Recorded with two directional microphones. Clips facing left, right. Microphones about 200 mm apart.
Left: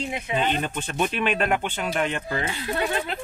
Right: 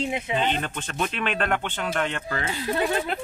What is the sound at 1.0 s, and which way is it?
Speech, 15° left (ahead or behind).